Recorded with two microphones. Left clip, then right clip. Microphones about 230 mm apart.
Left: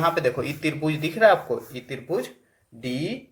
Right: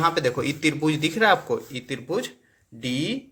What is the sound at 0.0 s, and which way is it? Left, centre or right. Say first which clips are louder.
Speech: even; right.